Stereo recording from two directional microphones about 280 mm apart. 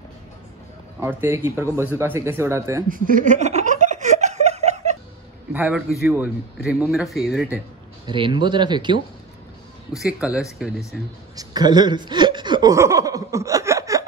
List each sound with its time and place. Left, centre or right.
0.9 s speech: centre
2.9 s laughter: right
5.5 s speech: centre
8.1 s speech: centre
9.9 s speech: centre
11.3 s chuckle: centre